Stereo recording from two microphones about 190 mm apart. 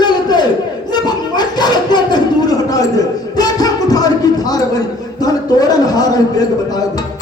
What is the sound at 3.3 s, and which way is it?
Music, 20° left (ahead or behind).